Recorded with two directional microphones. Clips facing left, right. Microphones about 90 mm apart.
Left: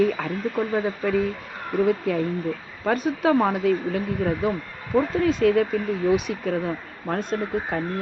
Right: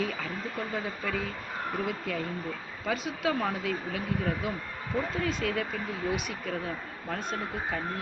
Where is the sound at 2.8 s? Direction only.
55° left (ahead or behind).